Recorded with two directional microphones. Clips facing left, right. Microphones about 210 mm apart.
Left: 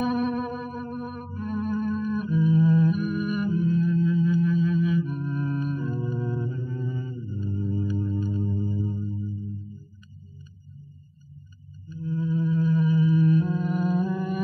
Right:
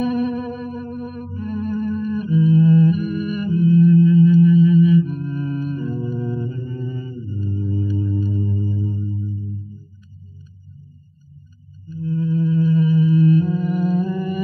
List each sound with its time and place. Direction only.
0.0 s music: 25° right (ahead or behind)
8.0 s singing bowl: 30° right (ahead or behind)
8.6 s music: 15° right (ahead or behind)
12.0 s music: 25° right (ahead or behind)